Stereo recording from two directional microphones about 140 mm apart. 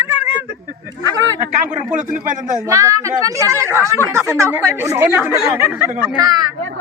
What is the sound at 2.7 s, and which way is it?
A woman's voice, 25° right (ahead or behind).